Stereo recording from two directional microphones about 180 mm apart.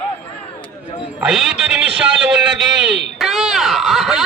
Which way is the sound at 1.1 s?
5° right (ahead or behind).